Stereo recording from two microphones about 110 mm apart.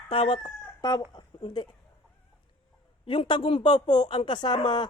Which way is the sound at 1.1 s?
40° left (ahead or behind).